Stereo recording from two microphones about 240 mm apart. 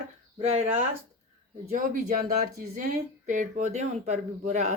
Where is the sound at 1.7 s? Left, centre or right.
Right.